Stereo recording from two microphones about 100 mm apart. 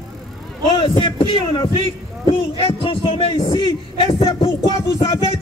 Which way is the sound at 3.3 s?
50° left (ahead or behind).